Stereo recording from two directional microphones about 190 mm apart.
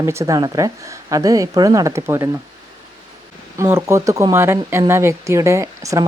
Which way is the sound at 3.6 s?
15° right (ahead or behind).